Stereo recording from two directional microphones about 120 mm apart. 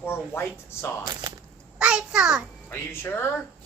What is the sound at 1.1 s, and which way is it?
Speech, 35° right (ahead or behind).